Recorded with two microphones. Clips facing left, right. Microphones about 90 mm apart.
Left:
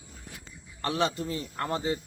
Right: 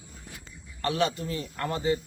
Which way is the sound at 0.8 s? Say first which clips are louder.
Right 1 dB; 30° left (ahead or behind).